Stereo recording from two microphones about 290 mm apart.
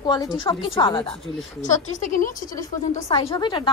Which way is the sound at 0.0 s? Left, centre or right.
Centre.